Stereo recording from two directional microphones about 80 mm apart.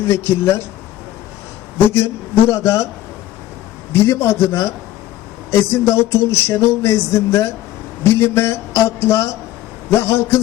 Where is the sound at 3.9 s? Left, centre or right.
Left.